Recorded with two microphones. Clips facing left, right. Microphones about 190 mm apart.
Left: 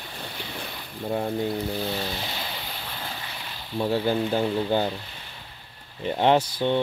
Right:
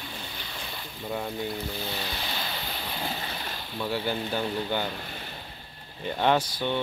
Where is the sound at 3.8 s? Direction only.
35° left (ahead or behind).